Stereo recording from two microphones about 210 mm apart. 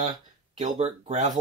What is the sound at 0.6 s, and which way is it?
Speech, 35° right (ahead or behind).